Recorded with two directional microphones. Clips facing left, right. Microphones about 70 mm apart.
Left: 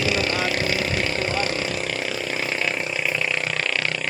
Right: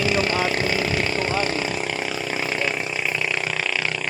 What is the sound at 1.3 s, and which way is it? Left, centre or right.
Vehicle, centre.